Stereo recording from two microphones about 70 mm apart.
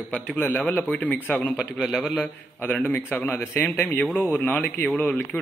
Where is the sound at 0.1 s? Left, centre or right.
Left.